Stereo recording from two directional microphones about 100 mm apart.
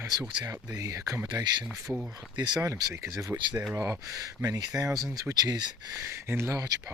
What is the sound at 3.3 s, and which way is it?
Speech, 15° right (ahead or behind).